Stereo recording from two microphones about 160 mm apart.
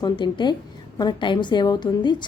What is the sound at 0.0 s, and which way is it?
A woman's voice, 30° left (ahead or behind).